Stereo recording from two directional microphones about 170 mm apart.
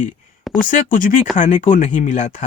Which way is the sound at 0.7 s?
50° left (ahead or behind).